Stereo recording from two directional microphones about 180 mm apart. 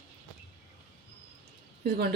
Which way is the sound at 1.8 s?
60° right (ahead or behind).